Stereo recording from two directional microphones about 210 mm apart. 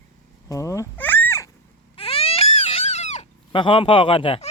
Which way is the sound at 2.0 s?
25° left (ahead or behind).